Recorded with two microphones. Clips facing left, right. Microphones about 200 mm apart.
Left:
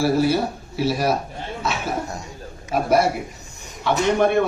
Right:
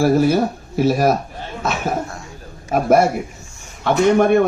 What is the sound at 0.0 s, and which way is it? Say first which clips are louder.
A man's voice: right 4 dB; 50° right (ahead or behind).